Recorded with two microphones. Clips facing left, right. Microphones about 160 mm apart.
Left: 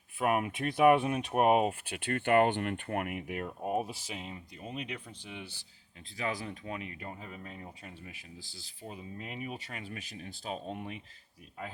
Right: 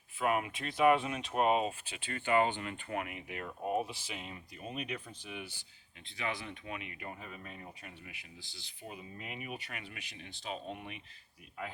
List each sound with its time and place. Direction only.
0.2 s speech: 50° left (ahead or behind); by 5.5 s 25° left (ahead or behind)
6.1 s speech: 40° left (ahead or behind)
8.4 s speech: 5° left (ahead or behind)
9.3 s speech: 30° left (ahead or behind)